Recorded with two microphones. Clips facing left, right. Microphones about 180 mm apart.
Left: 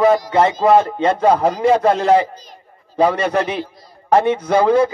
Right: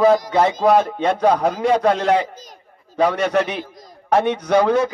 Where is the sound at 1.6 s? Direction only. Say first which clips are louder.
Left 3 dB; 5° left (ahead or behind).